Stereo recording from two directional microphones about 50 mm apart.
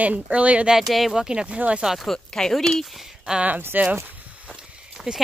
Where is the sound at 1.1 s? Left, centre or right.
Centre.